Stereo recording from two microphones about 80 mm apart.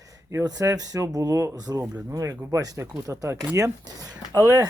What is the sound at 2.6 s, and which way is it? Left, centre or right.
Speech, right.